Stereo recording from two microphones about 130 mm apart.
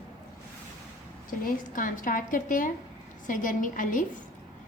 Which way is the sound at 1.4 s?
90° left.